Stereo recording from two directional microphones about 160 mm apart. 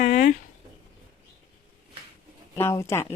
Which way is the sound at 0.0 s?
50° left (ahead or behind).